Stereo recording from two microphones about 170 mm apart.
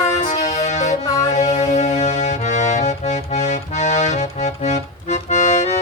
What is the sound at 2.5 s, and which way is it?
Accordion, 45° left (ahead or behind).